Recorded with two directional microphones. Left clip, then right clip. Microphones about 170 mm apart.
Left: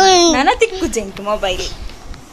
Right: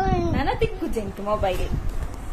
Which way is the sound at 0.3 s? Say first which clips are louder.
Left 12 dB; 50° left (ahead or behind).